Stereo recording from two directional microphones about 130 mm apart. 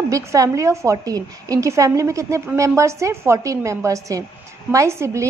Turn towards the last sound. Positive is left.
turn(degrees=-20)  # may be behind; listen again after turning